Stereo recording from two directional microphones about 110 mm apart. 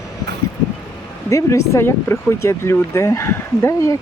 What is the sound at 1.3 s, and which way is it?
Speech, 25° left (ahead or behind).